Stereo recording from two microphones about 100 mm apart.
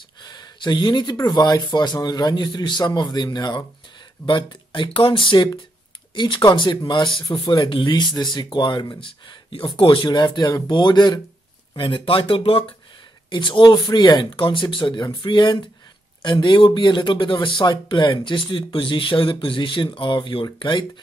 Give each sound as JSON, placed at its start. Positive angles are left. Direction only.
{"t": 0.2, "sound": "speech", "side_deg": 45}
{"t": 11.7, "sound": "speech", "side_deg": 60}